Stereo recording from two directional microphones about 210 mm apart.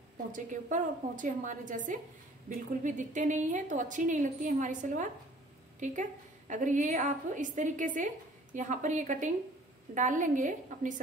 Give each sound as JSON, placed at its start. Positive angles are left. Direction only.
{"t": 0.3, "sound": "a woman's voice", "side_deg": -35}